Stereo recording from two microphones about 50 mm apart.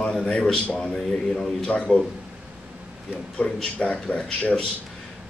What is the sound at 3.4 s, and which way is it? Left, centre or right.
A man's voice, left.